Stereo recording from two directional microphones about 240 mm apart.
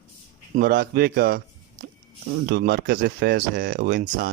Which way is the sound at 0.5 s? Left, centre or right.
Right.